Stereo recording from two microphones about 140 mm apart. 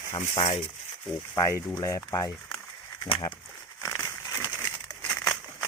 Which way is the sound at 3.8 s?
25° left (ahead or behind).